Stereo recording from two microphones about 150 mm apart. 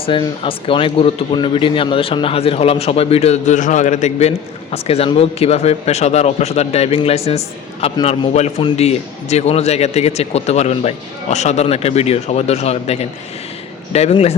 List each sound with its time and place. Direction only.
0.0 s a man's voice: 35° left (ahead or behind)